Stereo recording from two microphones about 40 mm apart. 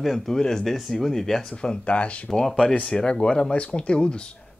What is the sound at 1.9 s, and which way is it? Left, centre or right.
Speech, left.